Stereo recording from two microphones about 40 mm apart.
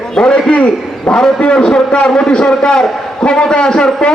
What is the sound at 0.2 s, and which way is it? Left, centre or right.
Speech, centre.